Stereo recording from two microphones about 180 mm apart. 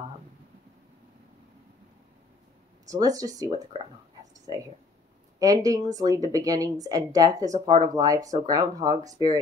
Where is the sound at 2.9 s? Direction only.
20° right (ahead or behind).